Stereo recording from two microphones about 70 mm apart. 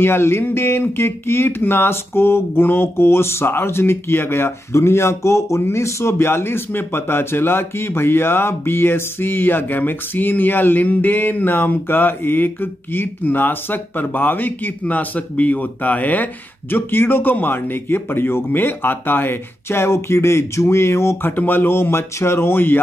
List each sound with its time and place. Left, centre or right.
0.0 s speech: left
21.3 s speech: left